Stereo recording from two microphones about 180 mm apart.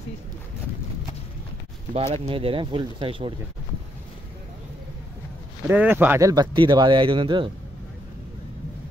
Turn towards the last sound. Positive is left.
turn(degrees=-30)  # may be behind; listen again after turning